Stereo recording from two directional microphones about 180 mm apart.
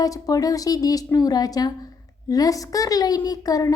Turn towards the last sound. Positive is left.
turn(degrees=20)  # may be behind; listen again after turning